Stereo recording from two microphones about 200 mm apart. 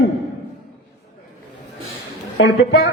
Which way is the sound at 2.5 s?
55° left (ahead or behind).